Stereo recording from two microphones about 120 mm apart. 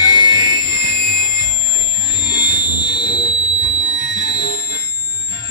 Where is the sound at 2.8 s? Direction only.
40° left (ahead or behind).